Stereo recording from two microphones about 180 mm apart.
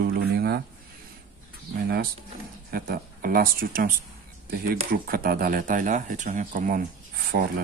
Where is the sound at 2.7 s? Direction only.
55° right (ahead or behind).